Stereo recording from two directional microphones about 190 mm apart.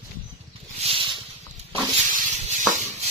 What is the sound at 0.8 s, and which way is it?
Snake, 30° right (ahead or behind).